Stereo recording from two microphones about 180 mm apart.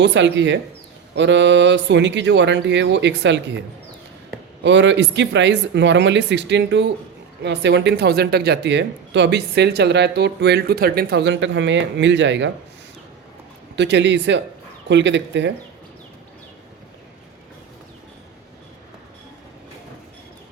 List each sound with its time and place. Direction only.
0.0 s speech: 80° right
4.6 s speech: 80° right
13.7 s speech: 75° right (ahead or behind)